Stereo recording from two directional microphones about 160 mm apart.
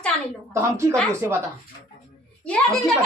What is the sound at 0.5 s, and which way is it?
Speech, 15° right (ahead or behind).